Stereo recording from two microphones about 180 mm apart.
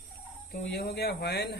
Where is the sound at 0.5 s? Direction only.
60° left (ahead or behind).